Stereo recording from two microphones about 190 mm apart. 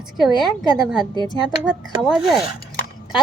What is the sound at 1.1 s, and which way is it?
Speech, 20° left (ahead or behind).